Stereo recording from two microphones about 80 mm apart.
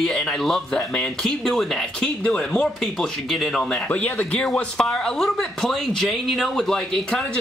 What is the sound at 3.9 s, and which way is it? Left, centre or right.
Speech, centre.